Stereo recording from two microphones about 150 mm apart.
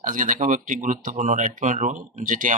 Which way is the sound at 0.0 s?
60° right (ahead or behind).